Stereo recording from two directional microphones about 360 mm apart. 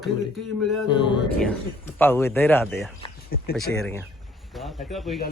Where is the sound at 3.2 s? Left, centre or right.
Left.